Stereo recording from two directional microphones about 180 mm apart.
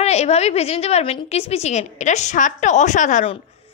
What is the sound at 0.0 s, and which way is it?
A woman's voice, 35° left (ahead or behind).